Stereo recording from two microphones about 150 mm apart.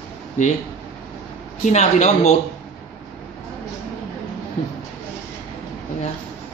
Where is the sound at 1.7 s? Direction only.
50° left (ahead or behind).